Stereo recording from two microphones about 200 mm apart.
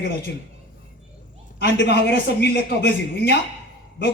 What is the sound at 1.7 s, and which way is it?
A man's voice, 60° left (ahead or behind).